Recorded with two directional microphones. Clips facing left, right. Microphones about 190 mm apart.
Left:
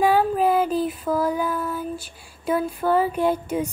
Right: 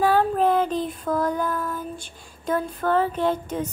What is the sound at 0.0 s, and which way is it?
Female singing, 10° left (ahead or behind).